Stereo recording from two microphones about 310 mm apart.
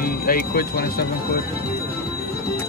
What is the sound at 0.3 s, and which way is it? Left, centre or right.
Speech, left.